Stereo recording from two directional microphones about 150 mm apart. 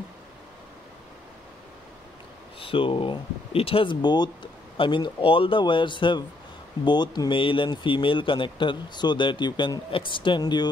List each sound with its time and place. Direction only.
2.6 s speech: 35° left (ahead or behind)